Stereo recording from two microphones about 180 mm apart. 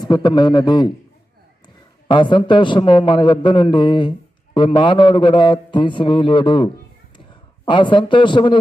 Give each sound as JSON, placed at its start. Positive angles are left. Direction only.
{"t": 0.0, "sound": "a man's voice", "side_deg": 25}
{"t": 2.0, "sound": "a man's voice", "side_deg": 25}